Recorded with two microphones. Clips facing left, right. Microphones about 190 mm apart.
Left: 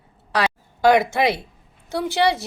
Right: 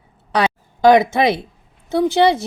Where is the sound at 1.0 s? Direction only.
20° right (ahead or behind).